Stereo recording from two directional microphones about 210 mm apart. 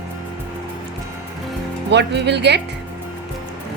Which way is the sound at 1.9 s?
55° right (ahead or behind).